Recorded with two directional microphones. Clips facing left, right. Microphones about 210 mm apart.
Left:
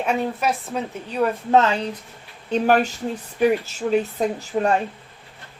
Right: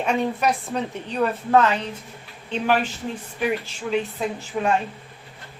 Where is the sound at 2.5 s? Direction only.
45° left (ahead or behind).